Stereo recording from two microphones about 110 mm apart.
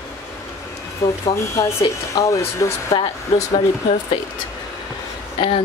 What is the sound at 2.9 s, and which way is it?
Speech, 65° left (ahead or behind).